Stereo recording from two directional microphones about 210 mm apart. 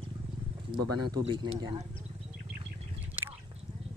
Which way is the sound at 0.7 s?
20° right (ahead or behind).